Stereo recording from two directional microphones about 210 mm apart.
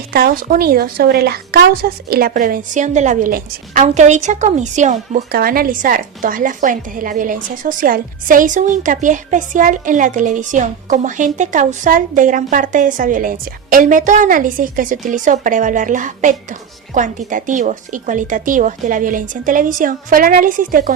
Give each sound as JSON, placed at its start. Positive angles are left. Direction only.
{"t": 0.1, "sound": "speech", "side_deg": -45}